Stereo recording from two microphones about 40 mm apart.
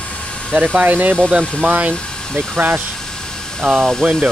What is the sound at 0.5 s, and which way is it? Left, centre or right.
Speech, right.